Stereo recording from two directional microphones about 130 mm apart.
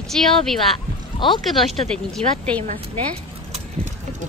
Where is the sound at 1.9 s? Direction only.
5° left (ahead or behind).